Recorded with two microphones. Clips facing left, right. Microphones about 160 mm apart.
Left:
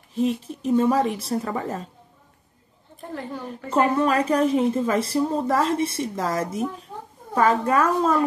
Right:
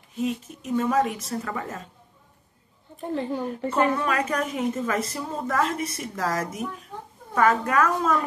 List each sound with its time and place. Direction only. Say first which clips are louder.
0.2 s a woman's voice: left 5 dB; 30° left (ahead or behind)
3.2 s speech: right 5 dB; 20° right (ahead or behind)
3.7 s a woman's voice: left 4 dB; 35° left (ahead or behind)